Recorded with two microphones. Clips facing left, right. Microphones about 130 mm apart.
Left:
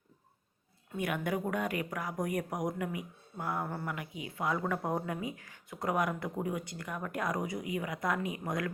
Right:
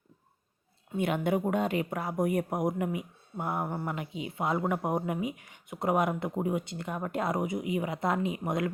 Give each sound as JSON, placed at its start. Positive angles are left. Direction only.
{"t": 0.9, "sound": "a woman's voice", "side_deg": -25}